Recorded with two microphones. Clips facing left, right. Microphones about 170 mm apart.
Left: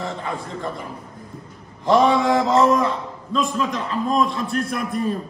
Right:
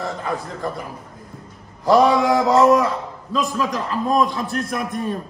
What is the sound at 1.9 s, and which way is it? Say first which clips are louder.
A man's voice: right 1 dB; centre (ahead or behind).